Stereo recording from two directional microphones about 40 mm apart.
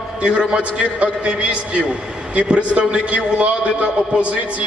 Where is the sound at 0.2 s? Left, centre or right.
Right.